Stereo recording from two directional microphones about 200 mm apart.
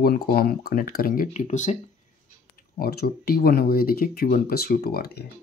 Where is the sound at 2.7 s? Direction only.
50° left (ahead or behind).